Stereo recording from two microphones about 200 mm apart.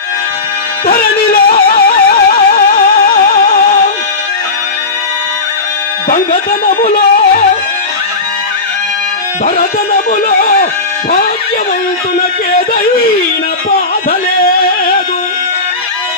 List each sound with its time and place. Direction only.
1.3 s music: 45° left (ahead or behind)
6.1 s music: 45° left (ahead or behind)
9.6 s speech: 45° left (ahead or behind)
12.5 s a sound: 45° left (ahead or behind)
14.1 s music: 45° left (ahead or behind)